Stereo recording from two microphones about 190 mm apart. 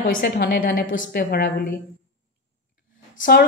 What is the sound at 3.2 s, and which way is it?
Speech, 55° left (ahead or behind).